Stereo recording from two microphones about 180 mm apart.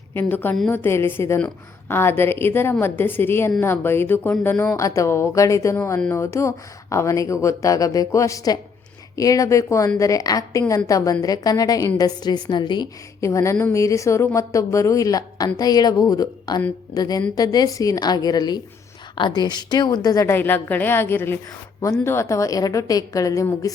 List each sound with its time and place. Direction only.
0.1 s a woman's voice: 10° left (ahead or behind)